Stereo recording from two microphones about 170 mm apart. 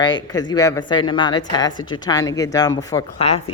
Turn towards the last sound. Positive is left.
turn(degrees=35)  # may be behind; listen again after turning